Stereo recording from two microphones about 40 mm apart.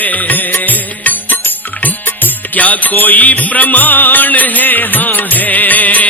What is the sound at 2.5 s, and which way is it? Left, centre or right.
Music, left.